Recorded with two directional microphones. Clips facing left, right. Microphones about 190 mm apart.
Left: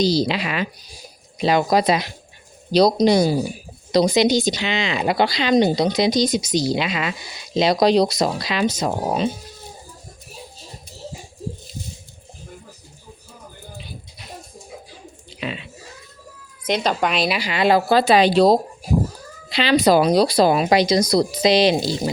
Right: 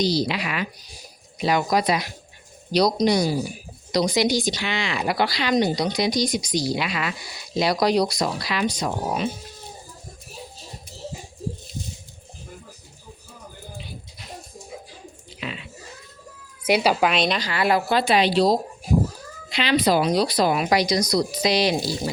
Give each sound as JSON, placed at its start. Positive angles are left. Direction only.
{"t": 0.3, "sound": "speech", "side_deg": 25}
{"t": 8.8, "sound": "speech", "side_deg": 45}
{"t": 15.4, "sound": "a sound", "side_deg": 25}
{"t": 16.6, "sound": "speech", "side_deg": -10}
{"t": 17.7, "sound": "speech", "side_deg": 35}
{"t": 19.5, "sound": "speech", "side_deg": 30}